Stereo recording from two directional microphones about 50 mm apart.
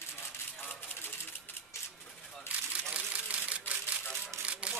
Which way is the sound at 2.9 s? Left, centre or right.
Right.